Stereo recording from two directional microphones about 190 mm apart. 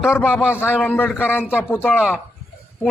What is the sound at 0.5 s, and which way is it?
A man's voice, 10° left (ahead or behind).